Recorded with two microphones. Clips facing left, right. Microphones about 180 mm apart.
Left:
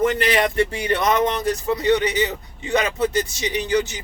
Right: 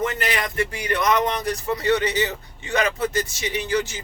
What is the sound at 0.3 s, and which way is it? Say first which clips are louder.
Speech: left 6 dB; 30° left (ahead or behind).